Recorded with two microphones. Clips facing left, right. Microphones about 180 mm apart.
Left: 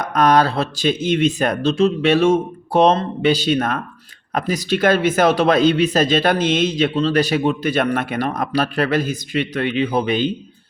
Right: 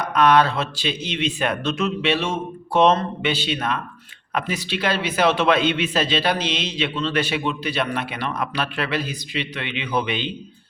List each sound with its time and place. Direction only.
0.0 s speech: 40° left (ahead or behind)
2.0 s a man's voice: 45° left (ahead or behind)